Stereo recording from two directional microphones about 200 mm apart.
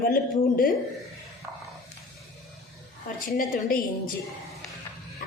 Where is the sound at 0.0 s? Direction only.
45° left (ahead or behind).